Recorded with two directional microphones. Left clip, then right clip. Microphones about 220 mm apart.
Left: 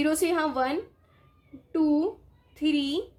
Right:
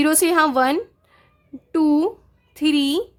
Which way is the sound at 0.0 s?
45° right (ahead or behind).